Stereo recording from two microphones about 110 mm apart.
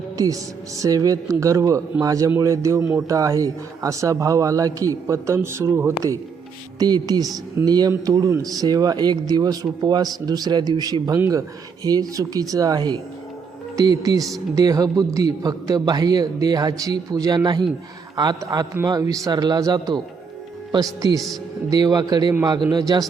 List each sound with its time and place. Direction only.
0.8 s a man's voice: 35° right (ahead or behind)
6.7 s speech: 40° right (ahead or behind)